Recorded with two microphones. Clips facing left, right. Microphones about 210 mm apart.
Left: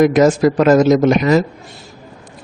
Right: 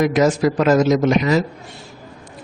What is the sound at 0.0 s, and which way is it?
Speech, 50° left (ahead or behind).